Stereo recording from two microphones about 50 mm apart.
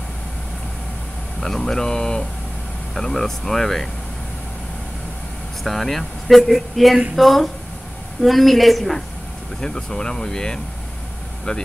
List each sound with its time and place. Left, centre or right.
1.4 s speech: centre
5.6 s speech: centre
9.6 s speech: centre